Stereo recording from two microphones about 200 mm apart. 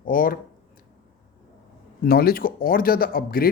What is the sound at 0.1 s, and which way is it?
Speech, 45° left (ahead or behind).